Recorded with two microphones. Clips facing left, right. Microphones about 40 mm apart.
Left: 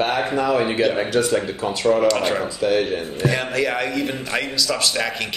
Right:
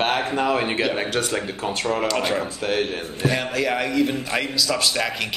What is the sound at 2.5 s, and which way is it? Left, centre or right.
Speech, right.